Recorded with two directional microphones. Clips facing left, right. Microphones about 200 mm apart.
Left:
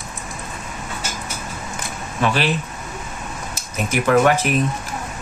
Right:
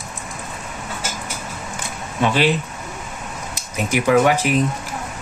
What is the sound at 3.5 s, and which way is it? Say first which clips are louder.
Speech: right 1 dB; 15° right (ahead or behind).